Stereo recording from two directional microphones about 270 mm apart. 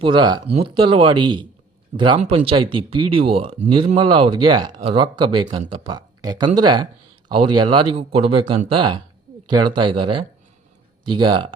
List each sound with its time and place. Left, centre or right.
0.0 s a man's voice: centre